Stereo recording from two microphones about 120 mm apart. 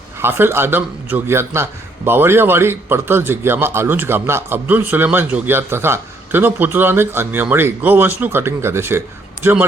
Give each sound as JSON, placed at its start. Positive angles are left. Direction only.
{"t": 0.2, "sound": "a man's voice", "side_deg": -20}